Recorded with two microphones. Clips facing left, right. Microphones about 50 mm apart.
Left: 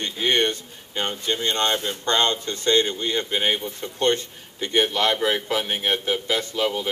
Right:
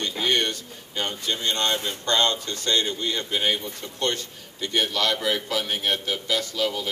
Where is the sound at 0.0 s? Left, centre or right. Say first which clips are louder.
Left 2 dB; left.